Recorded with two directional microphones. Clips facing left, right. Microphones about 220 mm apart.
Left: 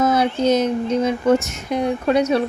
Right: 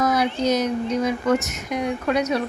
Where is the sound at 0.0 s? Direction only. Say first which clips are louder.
Left 3 dB; 25° left (ahead or behind).